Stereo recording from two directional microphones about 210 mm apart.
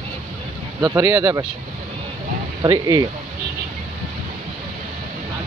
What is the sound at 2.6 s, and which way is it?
Speech, 15° right (ahead or behind).